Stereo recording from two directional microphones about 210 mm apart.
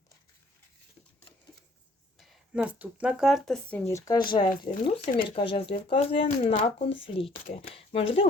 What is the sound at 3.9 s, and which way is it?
Speech, 15° left (ahead or behind).